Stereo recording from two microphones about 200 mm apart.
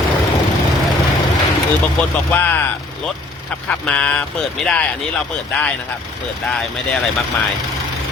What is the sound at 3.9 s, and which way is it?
Speech, 5° left (ahead or behind).